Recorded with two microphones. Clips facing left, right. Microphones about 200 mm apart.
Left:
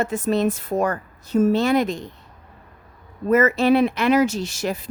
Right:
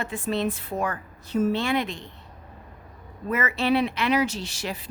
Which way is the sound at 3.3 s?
45° left (ahead or behind).